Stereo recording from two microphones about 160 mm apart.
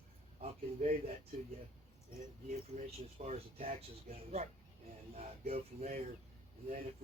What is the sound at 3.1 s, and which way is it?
Speech, 40° right (ahead or behind).